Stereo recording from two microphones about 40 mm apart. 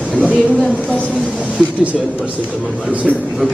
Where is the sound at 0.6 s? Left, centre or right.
Left.